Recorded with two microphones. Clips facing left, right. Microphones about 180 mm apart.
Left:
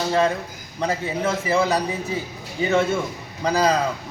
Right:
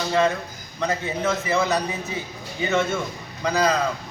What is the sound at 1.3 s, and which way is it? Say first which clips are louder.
A man's voice: left 2 dB; 35° left (ahead or behind).